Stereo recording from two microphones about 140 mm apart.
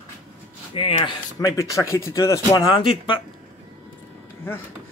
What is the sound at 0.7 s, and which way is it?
Speech, 40° left (ahead or behind).